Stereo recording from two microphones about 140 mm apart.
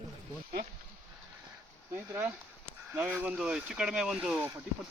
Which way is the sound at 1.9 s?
15° right (ahead or behind).